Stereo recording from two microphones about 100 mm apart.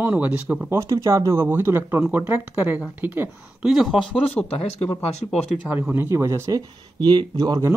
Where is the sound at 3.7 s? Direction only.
Centre (ahead or behind).